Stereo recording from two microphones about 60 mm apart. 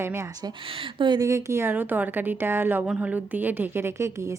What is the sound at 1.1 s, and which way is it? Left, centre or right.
Speech, right.